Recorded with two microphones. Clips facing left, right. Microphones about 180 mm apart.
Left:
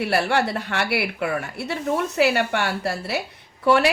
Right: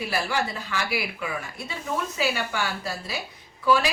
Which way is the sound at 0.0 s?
65° left (ahead or behind).